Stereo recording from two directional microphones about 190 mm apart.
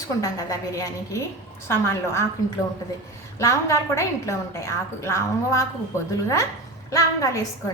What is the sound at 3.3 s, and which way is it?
A woman's voice, 15° left (ahead or behind).